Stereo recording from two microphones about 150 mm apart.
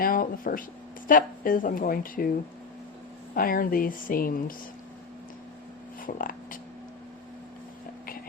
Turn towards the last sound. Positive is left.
turn(degrees=65)  # may be behind; listen again after turning